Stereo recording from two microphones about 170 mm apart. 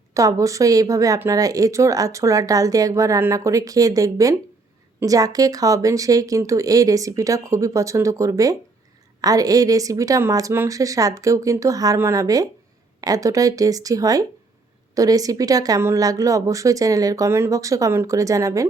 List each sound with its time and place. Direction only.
0.1 s speech: 20° right (ahead or behind)